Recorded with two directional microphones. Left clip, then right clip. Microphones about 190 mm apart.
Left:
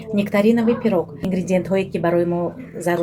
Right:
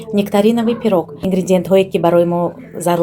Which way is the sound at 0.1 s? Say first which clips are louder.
Right 4 dB; 35° right (ahead or behind).